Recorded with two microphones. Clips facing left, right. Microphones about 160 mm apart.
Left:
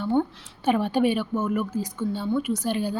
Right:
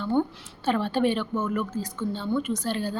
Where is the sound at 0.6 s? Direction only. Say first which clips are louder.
Left 2 dB; 15° left (ahead or behind).